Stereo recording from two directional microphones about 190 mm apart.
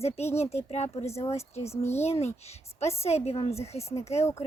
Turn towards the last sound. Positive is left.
turn(degrees=35)  # may be behind; listen again after turning